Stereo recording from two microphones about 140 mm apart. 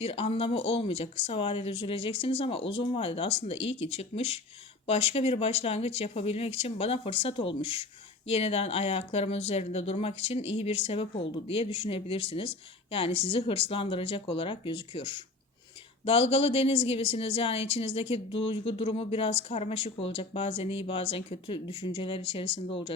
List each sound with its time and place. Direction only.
0.0 s speech: 45° left (ahead or behind)